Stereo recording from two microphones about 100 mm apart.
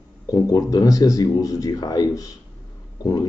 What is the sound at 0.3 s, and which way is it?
Speech, 40° left (ahead or behind).